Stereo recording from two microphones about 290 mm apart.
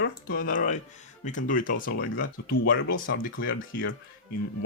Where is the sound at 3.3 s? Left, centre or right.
Left.